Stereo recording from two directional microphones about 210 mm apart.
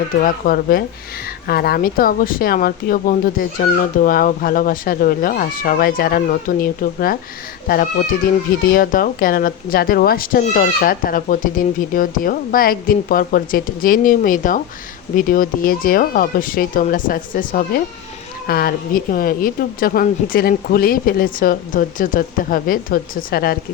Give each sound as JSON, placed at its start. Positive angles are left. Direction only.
{"t": 0.2, "sound": "speech", "side_deg": 40}